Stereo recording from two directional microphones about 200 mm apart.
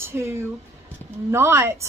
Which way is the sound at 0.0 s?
10° right (ahead or behind).